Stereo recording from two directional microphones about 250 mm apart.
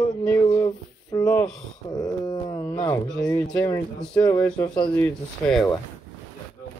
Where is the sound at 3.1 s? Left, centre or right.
Centre.